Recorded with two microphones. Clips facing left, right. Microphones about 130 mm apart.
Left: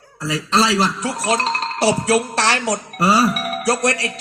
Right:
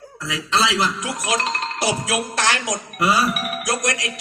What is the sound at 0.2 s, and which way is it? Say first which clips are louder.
A man's voice: left 3 dB; 35° left (ahead or behind).